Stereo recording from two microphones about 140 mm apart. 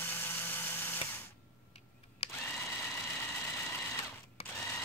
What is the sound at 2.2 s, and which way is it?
Camera, 50° left (ahead or behind).